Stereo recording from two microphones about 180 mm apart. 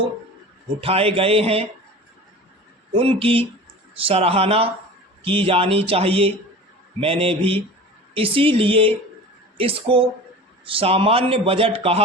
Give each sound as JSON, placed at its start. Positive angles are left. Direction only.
{"t": 0.8, "sound": "a man's voice", "side_deg": -30}
{"t": 2.9, "sound": "a man's voice", "side_deg": -30}